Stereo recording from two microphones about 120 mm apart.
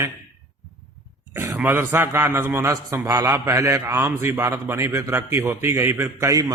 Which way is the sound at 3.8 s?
15° right (ahead or behind).